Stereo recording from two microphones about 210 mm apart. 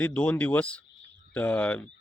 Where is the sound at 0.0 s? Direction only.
5° left (ahead or behind).